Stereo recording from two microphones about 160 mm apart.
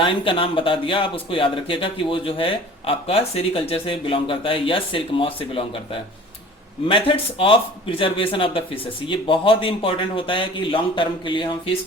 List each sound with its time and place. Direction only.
0.0 s speech: 35° left (ahead or behind)